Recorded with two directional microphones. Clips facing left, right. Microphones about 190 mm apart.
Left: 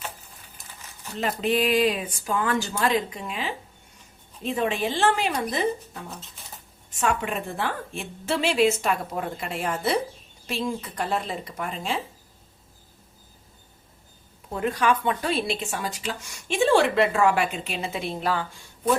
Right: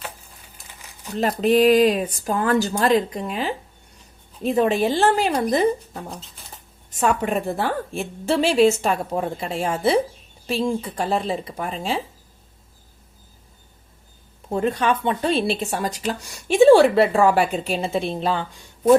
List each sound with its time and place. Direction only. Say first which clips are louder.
1.2 s speech: right 7 dB; 40° right (ahead or behind)
14.5 s speech: right 3 dB; 25° right (ahead or behind)